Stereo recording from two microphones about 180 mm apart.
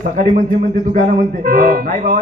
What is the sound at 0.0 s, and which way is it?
Speech, 50° right (ahead or behind).